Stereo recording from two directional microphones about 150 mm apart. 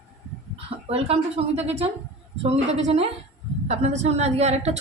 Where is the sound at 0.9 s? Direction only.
40° right (ahead or behind).